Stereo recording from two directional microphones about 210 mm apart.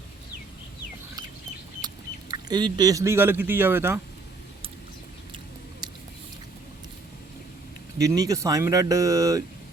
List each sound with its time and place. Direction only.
2.3 s speech: 20° right (ahead or behind)
7.9 s speech: 15° right (ahead or behind)